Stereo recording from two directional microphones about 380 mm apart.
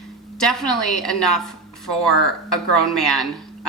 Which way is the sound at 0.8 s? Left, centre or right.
Left.